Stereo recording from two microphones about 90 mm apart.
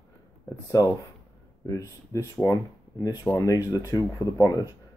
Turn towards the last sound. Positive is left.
turn(degrees=40)  # may be behind; listen again after turning